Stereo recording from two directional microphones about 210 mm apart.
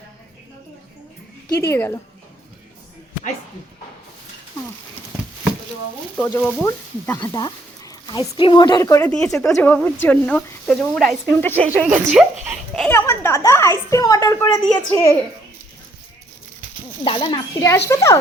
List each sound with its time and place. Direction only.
1.5 s speech: 15° left (ahead or behind)
6.1 s speech: 5° left (ahead or behind)
17.0 s a child's voice: 25° left (ahead or behind)